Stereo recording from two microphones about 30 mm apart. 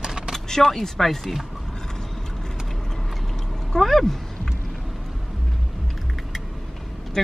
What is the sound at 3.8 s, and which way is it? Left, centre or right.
Speech, centre.